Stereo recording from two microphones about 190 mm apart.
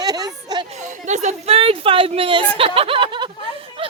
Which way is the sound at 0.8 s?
40° right (ahead or behind).